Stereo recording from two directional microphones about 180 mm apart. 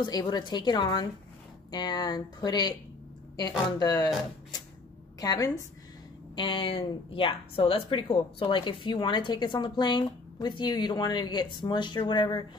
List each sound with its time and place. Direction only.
0.0 s speech: 25° left (ahead or behind)
5.2 s speech: 20° left (ahead or behind)